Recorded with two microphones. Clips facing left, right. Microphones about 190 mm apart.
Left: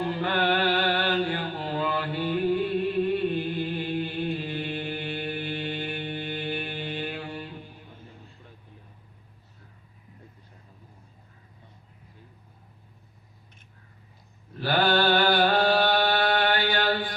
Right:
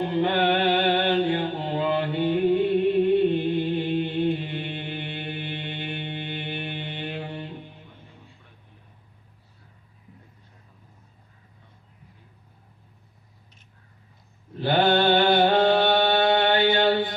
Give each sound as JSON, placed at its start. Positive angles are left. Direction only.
{"t": 0.0, "sound": "mantra", "side_deg": -25}
{"t": 14.6, "sound": "mantra", "side_deg": -20}